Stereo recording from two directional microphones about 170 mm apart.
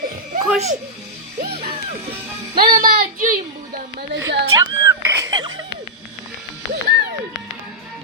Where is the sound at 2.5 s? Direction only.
55° right (ahead or behind).